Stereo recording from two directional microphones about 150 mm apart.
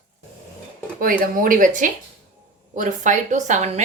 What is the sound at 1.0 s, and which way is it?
A woman's voice, 70° right (ahead or behind).